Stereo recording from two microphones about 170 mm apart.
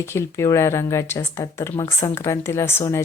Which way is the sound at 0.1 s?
15° left (ahead or behind).